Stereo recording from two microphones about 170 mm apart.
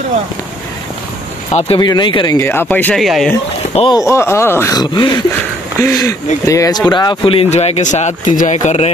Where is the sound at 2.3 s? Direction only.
15° left (ahead or behind).